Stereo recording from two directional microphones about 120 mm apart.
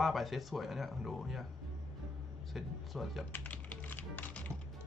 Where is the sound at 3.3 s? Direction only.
15° left (ahead or behind).